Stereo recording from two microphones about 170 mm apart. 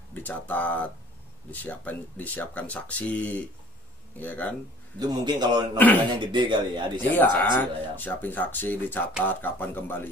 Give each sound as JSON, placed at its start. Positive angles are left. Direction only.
{"t": 0.1, "sound": "speech", "side_deg": 10}
{"t": 4.9, "sound": "speech", "side_deg": -25}
{"t": 5.8, "sound": "speech", "side_deg": 10}
{"t": 6.1, "sound": "speech", "side_deg": -25}
{"t": 7.0, "sound": "speech", "side_deg": 10}